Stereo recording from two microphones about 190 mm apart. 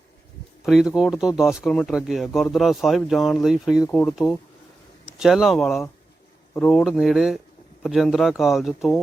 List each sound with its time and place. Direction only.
0.6 s speech: centre (ahead or behind)
5.2 s speech: centre (ahead or behind)